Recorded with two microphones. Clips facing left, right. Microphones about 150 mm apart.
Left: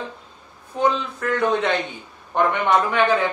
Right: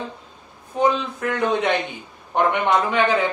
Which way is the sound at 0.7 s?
15° right (ahead or behind).